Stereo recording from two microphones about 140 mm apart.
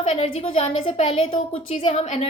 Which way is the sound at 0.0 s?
50° left (ahead or behind).